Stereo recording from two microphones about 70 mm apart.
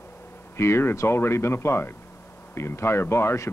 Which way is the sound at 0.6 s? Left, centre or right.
Left.